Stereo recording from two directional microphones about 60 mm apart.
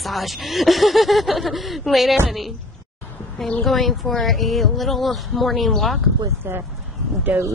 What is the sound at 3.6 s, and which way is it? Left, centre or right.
Speech, centre.